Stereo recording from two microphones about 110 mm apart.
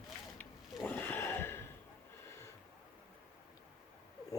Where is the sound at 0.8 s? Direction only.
20° left (ahead or behind).